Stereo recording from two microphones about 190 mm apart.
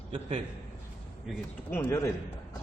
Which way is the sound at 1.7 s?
15° left (ahead or behind).